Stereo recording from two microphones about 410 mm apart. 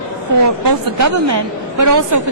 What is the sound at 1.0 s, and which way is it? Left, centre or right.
A woman's voice, right.